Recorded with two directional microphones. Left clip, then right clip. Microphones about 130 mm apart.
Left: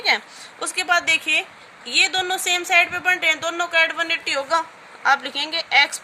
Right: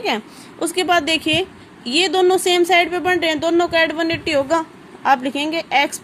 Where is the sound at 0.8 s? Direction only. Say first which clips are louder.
Right 2 dB; 35° right (ahead or behind).